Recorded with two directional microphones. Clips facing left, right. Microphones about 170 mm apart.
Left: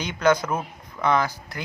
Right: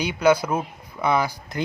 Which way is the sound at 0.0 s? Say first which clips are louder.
Right 2 dB; 10° right (ahead or behind).